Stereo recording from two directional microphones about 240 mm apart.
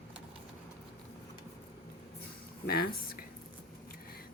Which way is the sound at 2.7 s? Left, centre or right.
Left.